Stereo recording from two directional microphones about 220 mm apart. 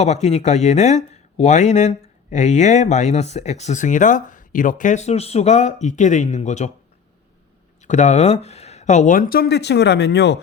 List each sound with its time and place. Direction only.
0.0 s speech: 30° left (ahead or behind)
7.8 s speech: 35° left (ahead or behind); by 10.4 s 50° left (ahead or behind)